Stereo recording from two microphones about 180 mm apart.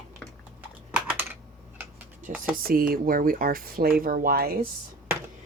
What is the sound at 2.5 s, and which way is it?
Speech, 55° right (ahead or behind).